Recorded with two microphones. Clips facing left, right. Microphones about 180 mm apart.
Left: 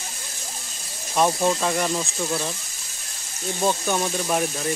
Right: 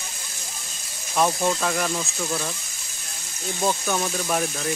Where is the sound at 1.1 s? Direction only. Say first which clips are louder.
Left 1 dB; 5° left (ahead or behind).